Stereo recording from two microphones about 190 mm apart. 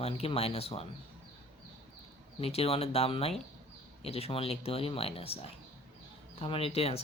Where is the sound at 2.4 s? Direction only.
30° left (ahead or behind).